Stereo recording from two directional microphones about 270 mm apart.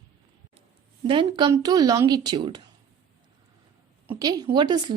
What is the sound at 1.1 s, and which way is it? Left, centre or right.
Speech, centre.